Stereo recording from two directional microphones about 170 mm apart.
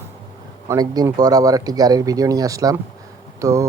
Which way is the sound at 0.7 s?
20° right (ahead or behind).